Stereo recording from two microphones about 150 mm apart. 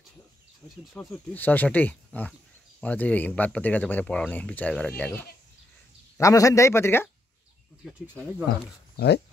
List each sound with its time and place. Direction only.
0.9 s speech: 10° left (ahead or behind)
8.9 s speech: 90° left